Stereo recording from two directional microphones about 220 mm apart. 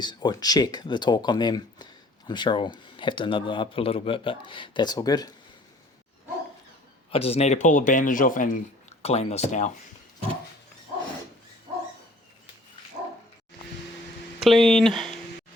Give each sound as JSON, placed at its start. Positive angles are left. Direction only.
{"t": 0.0, "sound": "speech", "side_deg": 20}
{"t": 7.1, "sound": "speech", "side_deg": 25}
{"t": 14.4, "sound": "speech", "side_deg": 0}